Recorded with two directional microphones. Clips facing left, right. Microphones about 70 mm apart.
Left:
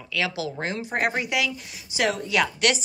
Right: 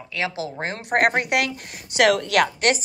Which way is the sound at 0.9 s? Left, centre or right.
Right.